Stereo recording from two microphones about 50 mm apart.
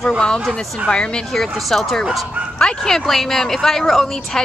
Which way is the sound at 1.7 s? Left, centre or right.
Centre.